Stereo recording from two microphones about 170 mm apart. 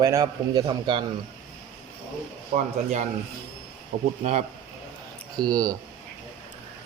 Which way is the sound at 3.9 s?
90° right.